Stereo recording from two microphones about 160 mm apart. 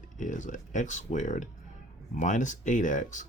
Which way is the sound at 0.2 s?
50° left (ahead or behind).